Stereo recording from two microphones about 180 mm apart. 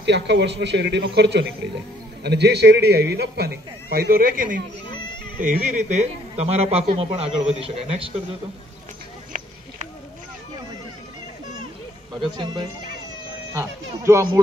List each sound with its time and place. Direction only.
0.0 s a man's voice: 75° right (ahead or behind); by 8.1 s 35° right (ahead or behind)
9.3 s a sound: 50° right (ahead or behind)
12.2 s speech: 25° right (ahead or behind)